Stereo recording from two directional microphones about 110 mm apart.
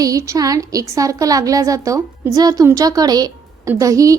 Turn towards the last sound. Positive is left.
turn(degrees=-30)  # may be behind; listen again after turning